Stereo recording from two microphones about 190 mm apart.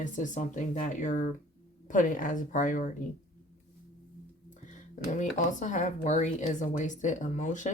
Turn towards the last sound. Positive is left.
turn(degrees=40)  # may be behind; listen again after turning